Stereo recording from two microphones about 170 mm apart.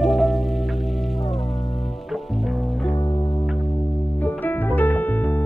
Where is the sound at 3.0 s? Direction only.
25° left (ahead or behind).